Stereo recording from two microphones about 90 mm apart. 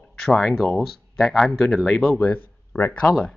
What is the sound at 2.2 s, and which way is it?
Speech, 20° left (ahead or behind).